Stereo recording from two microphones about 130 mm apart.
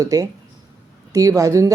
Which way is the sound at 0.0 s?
25° right (ahead or behind).